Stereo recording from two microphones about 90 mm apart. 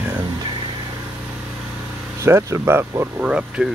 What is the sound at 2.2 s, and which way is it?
Speech, 30° right (ahead or behind).